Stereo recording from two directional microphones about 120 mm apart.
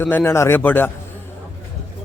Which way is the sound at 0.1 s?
20° left (ahead or behind).